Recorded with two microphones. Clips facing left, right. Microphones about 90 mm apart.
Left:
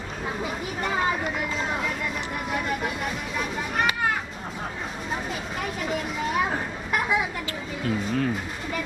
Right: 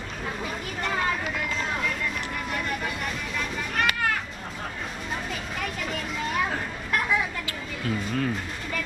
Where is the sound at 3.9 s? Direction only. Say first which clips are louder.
Even; 15° left (ahead or behind).